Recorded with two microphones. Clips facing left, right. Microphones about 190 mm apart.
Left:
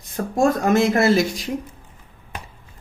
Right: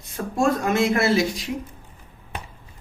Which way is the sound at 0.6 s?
40° left (ahead or behind).